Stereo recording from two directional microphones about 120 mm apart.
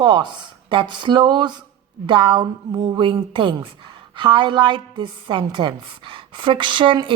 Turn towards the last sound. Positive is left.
turn(degrees=-45)  # may be behind; listen again after turning